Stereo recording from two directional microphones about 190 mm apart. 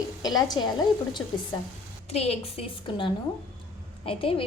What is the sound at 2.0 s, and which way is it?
A woman's voice, 35° left (ahead or behind).